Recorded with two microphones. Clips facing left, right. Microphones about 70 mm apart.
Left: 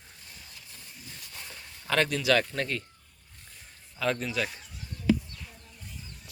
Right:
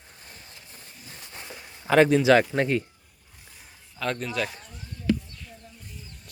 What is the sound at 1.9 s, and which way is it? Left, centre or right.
Speech, centre.